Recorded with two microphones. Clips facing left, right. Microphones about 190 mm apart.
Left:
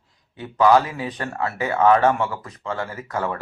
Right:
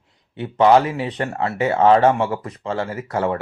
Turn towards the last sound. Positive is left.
turn(degrees=-25)  # may be behind; listen again after turning